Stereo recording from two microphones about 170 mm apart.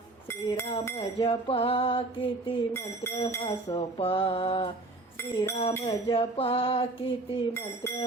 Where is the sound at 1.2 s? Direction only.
35° left (ahead or behind).